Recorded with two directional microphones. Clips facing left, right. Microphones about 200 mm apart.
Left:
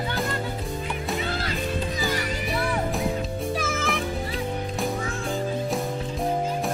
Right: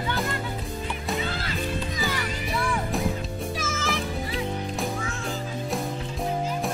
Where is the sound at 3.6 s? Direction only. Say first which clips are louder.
Left 3 dB; 55° left (ahead or behind).